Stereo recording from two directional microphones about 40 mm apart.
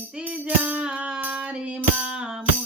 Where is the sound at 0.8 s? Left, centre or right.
Right.